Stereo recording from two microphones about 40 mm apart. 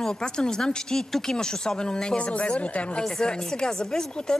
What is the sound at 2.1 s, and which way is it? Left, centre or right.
Speech, left.